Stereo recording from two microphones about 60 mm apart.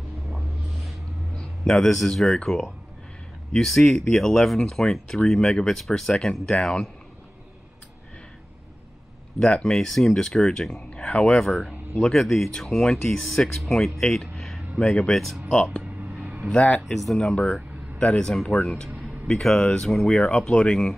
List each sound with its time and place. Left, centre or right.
1.6 s speech: centre
9.4 s speech: centre
10.9 s speech: centre
12.0 s speech: centre
15.8 s a sound: centre
16.4 s speech: left
16.8 s speech: centre
17.9 s speech: centre